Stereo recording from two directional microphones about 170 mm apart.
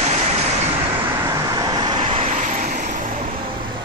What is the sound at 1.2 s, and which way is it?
Vehicle, 20° right (ahead or behind).